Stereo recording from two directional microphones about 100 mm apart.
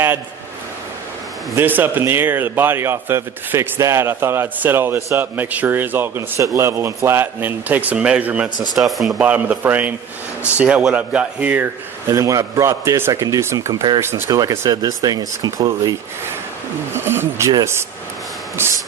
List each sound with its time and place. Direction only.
1.5 s a man's voice: 20° right (ahead or behind)
8.7 s speech: centre (ahead or behind)
9.2 s speech: 15° right (ahead or behind)
12.0 s a man's voice: 35° right (ahead or behind)
16.9 s a man's voice: 25° right (ahead or behind)
18.6 s a man's voice: 25° right (ahead or behind)